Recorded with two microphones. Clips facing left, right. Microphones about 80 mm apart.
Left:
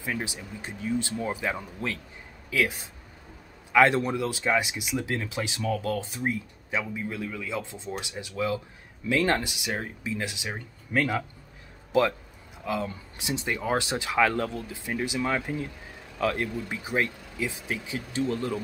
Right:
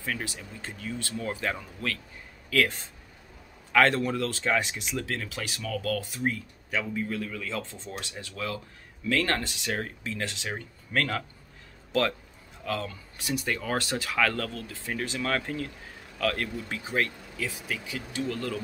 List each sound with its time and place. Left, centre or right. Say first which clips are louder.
0.0 s speech: left 2 dB; centre
12.6 s speech: left 2 dB; centre